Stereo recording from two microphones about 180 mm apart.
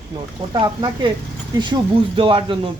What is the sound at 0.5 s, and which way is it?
Speech, 25° right (ahead or behind).